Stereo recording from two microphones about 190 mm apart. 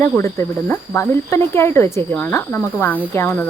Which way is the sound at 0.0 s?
15° left (ahead or behind).